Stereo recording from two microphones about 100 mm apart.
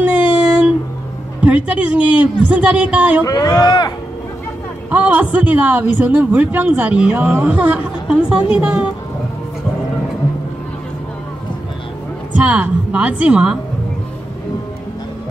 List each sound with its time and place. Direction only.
0.0 s a sound: 15° right (ahead or behind)
1.4 s a woman's voice: 15° right (ahead or behind)
3.3 s speech: 40° left (ahead or behind)
4.9 s a woman's voice: 15° right (ahead or behind)
12.4 s a woman's voice: 15° right (ahead or behind)